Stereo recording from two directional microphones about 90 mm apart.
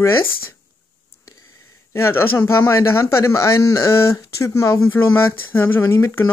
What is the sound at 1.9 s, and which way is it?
Speech, 30° left (ahead or behind).